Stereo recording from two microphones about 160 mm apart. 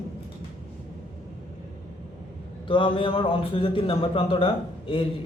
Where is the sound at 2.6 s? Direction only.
30° left (ahead or behind).